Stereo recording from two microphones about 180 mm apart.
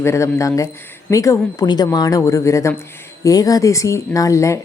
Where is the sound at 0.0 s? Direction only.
15° left (ahead or behind).